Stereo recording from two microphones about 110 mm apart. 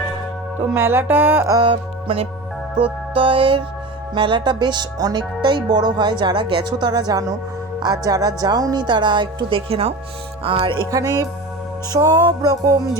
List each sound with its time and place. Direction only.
0.7 s speech: 20° right (ahead or behind)
1.6 s music: 55° right (ahead or behind)
2.7 s a woman's voice: 55° right (ahead or behind)
10.9 s a woman's voice: 30° right (ahead or behind)